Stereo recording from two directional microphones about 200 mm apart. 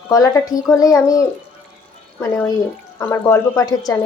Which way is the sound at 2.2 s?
10° left (ahead or behind).